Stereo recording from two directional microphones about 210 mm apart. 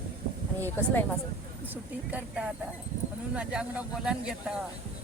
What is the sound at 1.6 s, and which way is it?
Speech, 10° right (ahead or behind).